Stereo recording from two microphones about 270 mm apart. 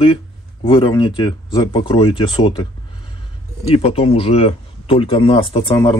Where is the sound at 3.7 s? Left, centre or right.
Left.